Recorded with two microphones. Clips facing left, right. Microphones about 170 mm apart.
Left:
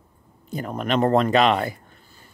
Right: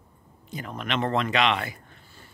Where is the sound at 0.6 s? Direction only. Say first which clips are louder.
Left 7 dB; 45° left (ahead or behind).